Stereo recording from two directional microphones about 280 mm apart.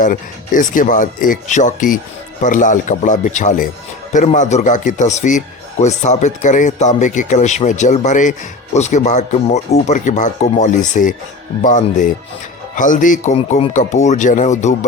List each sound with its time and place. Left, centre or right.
0.0 s speech: left